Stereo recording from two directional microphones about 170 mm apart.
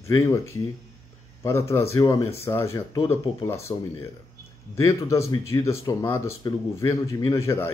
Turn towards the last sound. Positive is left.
turn(degrees=15)  # may be behind; listen again after turning